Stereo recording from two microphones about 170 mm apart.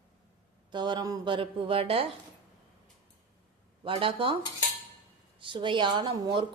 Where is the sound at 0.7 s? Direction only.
25° right (ahead or behind).